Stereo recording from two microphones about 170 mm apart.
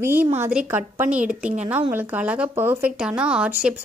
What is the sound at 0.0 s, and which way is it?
Speech, 10° right (ahead or behind).